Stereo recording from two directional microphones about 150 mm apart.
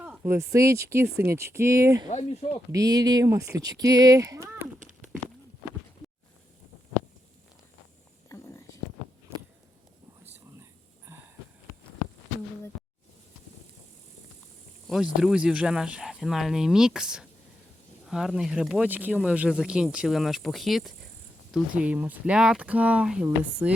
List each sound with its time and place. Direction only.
0.2 s speech: 20° right (ahead or behind)
2.0 s speech: 45° left (ahead or behind)
2.7 s speech: 25° right (ahead or behind)
10.6 s whispering: 15° right (ahead or behind)
14.8 s speech: 5° right (ahead or behind)